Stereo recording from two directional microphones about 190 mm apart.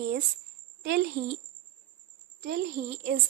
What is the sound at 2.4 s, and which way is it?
Speech, 50° right (ahead or behind).